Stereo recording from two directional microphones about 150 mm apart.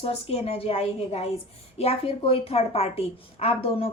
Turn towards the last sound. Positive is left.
turn(degrees=40)  # may be behind; listen again after turning